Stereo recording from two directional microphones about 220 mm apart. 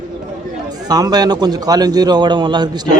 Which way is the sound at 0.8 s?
15° right (ahead or behind).